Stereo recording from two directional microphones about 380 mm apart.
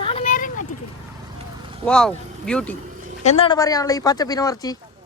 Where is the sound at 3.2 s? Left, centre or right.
Centre.